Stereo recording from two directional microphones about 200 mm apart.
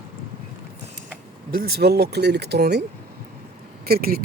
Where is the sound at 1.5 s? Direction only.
50° right (ahead or behind).